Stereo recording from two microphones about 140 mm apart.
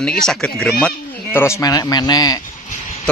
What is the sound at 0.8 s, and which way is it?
Speech, 15° left (ahead or behind).